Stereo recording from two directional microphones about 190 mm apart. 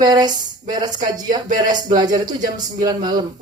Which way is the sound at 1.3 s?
45° right (ahead or behind).